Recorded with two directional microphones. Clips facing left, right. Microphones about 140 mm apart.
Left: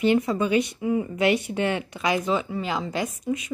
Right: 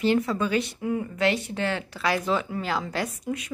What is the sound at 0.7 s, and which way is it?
Speech, 5° left (ahead or behind).